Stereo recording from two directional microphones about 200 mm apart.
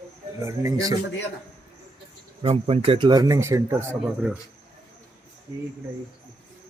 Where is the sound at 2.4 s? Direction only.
30° right (ahead or behind); by 4.4 s 10° right (ahead or behind).